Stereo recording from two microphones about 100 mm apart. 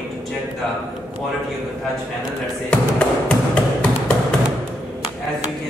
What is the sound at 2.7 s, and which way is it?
Music, 10° left (ahead or behind).